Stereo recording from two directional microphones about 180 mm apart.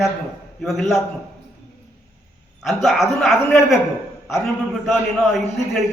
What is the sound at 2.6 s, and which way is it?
Speech, centre (ahead or behind).